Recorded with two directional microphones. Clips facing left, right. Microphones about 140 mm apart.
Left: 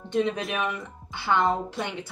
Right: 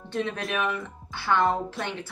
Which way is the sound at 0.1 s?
15° left (ahead or behind).